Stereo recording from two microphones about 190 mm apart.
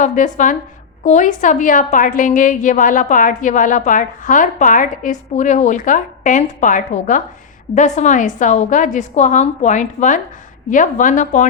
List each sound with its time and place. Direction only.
0.0 s a woman's voice: 40° left (ahead or behind)